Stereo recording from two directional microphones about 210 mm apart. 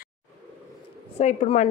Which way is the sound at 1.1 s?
30° left (ahead or behind).